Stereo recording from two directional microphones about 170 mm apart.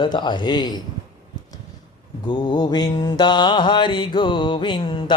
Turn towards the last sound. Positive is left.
turn(degrees=30)  # may be behind; listen again after turning